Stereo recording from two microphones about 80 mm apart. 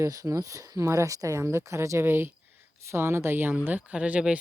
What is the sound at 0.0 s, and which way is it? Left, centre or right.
Speech, right.